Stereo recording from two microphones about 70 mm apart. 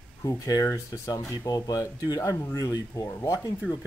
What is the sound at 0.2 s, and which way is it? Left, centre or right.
Speech, left.